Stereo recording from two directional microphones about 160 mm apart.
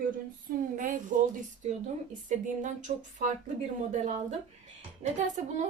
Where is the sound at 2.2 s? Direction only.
50° right (ahead or behind).